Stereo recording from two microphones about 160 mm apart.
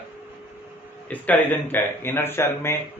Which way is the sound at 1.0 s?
10° left (ahead or behind).